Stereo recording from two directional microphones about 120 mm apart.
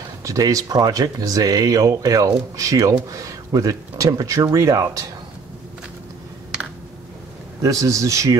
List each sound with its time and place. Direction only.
0.2 s speech: 30° right (ahead or behind)
7.6 s speech: 25° right (ahead or behind)